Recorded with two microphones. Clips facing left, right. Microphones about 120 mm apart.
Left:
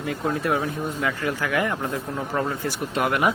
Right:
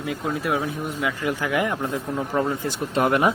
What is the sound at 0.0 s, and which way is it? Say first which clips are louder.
Speech: left 1 dB; 5° right (ahead or behind).